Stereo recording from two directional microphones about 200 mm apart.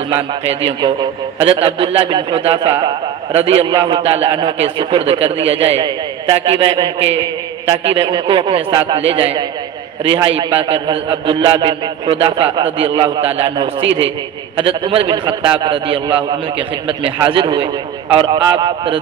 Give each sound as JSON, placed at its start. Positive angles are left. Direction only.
{"t": 0.1, "sound": "a man's voice", "side_deg": -30}